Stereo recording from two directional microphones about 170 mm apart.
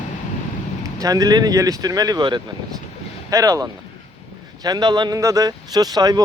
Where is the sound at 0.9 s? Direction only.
20° right (ahead or behind).